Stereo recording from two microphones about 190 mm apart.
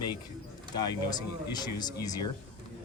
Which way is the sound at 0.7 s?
20° left (ahead or behind).